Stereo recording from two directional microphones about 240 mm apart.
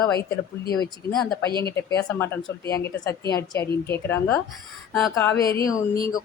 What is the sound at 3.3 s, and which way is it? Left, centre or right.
Speech, centre.